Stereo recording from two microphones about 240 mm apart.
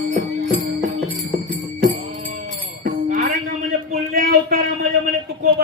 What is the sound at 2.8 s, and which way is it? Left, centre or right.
Music, right.